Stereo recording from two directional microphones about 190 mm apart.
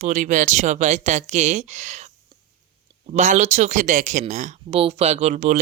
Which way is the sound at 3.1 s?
40° right (ahead or behind).